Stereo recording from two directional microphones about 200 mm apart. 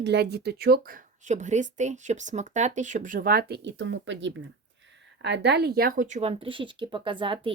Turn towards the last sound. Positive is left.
turn(degrees=-25)  # may be behind; listen again after turning